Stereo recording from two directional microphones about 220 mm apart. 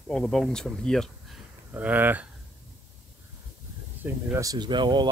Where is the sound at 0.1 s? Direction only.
Centre (ahead or behind).